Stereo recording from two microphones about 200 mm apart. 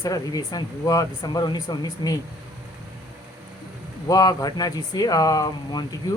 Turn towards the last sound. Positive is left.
turn(degrees=20)  # may be behind; listen again after turning